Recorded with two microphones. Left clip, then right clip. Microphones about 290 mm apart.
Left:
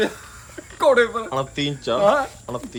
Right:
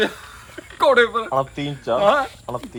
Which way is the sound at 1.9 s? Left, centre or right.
Centre.